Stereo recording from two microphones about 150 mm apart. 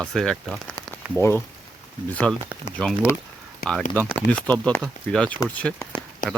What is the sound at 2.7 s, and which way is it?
Speech, 50° left (ahead or behind).